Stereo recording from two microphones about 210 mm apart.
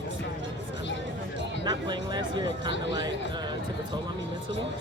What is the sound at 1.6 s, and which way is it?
Speech, 20° right (ahead or behind).